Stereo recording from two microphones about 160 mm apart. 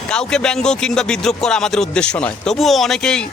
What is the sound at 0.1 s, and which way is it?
Speech, 5° left (ahead or behind).